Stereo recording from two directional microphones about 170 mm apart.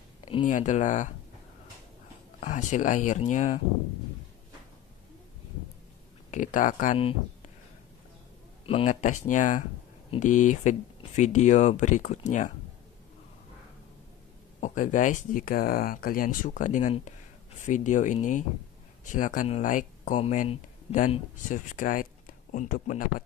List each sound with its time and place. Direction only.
0.2 s a sound: 30° left (ahead or behind)
0.5 s speech: 45° left (ahead or behind)
2.4 s speech: 50° left (ahead or behind)
6.3 s speech: 50° left (ahead or behind)
8.6 s speech: 40° left (ahead or behind)
14.6 s speech: 50° left (ahead or behind)
20.2 s speech: 40° left (ahead or behind); by 23.2 s 55° left (ahead or behind)